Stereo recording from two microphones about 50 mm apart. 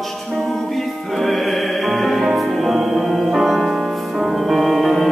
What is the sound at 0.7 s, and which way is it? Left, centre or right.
Music, centre.